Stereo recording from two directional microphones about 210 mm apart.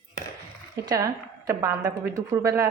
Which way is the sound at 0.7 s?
15° right (ahead or behind).